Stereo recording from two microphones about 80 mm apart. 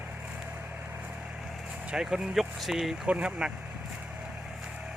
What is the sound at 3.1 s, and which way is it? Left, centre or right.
Speech, centre.